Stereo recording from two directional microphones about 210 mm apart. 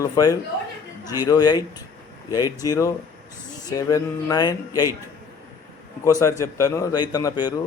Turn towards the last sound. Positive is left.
turn(degrees=20)  # may be behind; listen again after turning